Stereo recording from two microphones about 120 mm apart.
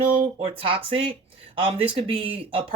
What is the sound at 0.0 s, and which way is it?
Speech, 50° right (ahead or behind).